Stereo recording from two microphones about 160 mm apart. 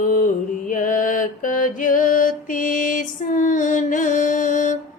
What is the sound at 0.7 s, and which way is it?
Mantra, 55° left (ahead or behind).